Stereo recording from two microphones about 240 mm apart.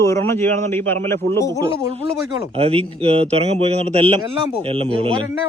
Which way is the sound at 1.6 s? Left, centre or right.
Right.